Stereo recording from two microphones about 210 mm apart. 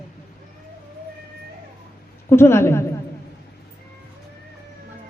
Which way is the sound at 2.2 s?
10° left (ahead or behind).